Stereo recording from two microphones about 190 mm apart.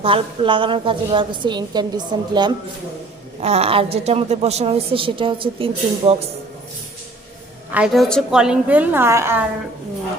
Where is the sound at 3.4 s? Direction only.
35° right (ahead or behind).